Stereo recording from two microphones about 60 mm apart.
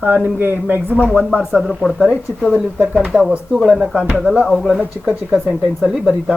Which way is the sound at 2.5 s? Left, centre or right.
Centre.